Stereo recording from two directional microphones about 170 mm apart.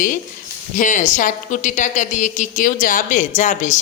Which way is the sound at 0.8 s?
50° left (ahead or behind).